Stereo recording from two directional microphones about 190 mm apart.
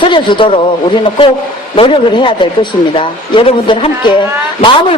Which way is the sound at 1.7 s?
30° left (ahead or behind).